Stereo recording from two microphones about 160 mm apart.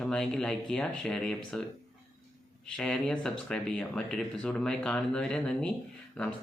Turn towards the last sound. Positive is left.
turn(degrees=5)  # may be behind; listen again after turning